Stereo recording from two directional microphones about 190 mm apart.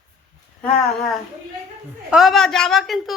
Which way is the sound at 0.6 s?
5° left (ahead or behind).